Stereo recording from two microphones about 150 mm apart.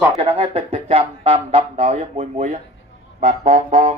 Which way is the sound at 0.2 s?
40° right (ahead or behind).